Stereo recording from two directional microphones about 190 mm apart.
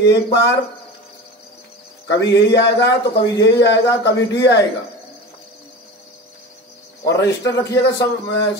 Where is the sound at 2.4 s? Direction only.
65° left (ahead or behind).